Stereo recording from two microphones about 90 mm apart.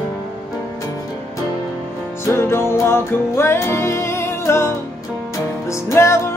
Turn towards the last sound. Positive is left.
turn(degrees=30)  # may be behind; listen again after turning